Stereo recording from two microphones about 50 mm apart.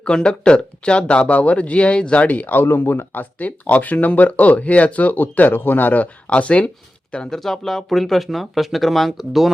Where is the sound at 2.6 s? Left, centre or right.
Left.